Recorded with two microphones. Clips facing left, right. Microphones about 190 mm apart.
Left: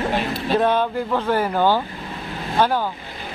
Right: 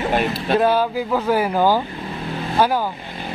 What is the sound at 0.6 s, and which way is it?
Speech, 5° right (ahead or behind).